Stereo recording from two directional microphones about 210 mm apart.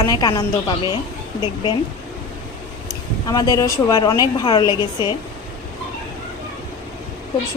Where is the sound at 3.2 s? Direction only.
20° left (ahead or behind).